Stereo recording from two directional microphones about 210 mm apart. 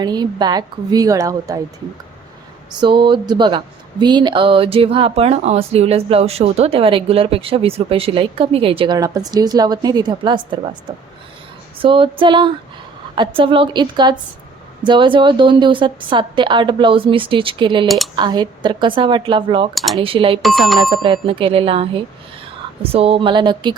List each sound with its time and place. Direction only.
0.0 s a woman's voice: 20° right (ahead or behind)
2.8 s speech: 20° right (ahead or behind)
17.8 s speech: centre (ahead or behind)
18.2 s speech: 20° right (ahead or behind)
19.7 s speech: centre (ahead or behind)
20.0 s speech: 25° right (ahead or behind)
20.4 s speech: centre (ahead or behind)
20.9 s speech: 25° right (ahead or behind)